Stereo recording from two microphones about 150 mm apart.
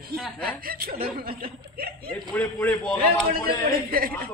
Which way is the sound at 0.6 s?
80° right.